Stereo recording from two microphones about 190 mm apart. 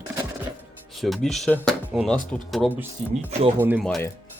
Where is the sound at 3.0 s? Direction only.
35° right (ahead or behind).